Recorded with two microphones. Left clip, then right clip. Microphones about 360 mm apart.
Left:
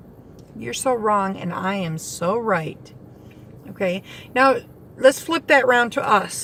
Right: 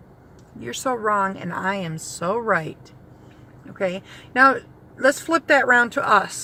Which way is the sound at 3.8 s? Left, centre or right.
Right.